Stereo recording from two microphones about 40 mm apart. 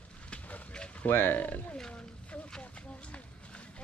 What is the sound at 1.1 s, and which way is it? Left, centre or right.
Speech, left.